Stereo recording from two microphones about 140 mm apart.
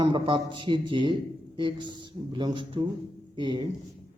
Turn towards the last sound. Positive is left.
turn(degrees=-35)  # may be behind; listen again after turning